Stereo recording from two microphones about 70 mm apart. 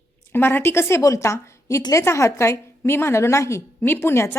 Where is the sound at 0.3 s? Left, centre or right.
Left.